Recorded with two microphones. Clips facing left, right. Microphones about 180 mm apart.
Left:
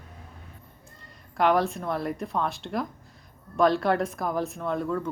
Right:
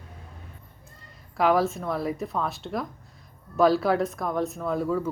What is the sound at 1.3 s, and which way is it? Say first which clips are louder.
Speech: right 1 dB; centre (ahead or behind).